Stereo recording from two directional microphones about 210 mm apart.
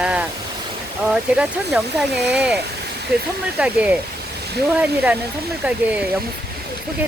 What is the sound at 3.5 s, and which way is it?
Speech, 5° right (ahead or behind).